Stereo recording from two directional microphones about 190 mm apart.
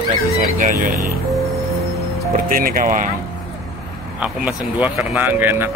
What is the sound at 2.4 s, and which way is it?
Speech, 50° right (ahead or behind).